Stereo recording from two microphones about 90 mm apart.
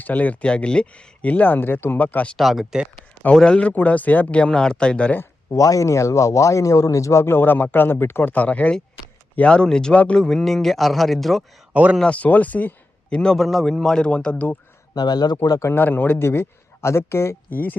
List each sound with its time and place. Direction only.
0.0 s a man's voice: 15° left (ahead or behind)
2.4 s speech: centre (ahead or behind)
3.3 s a man's voice: 10° left (ahead or behind)
5.2 s speech: 35° left (ahead or behind); by 11.4 s centre (ahead or behind)
11.7 s speech: 15° right (ahead or behind)
11.9 s a man's voice: 15° left (ahead or behind)
14.9 s speech: 50° left (ahead or behind)
15.7 s a man's voice: 20° left (ahead or behind)